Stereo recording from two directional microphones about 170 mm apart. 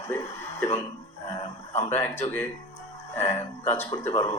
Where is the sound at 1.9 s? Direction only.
15° left (ahead or behind).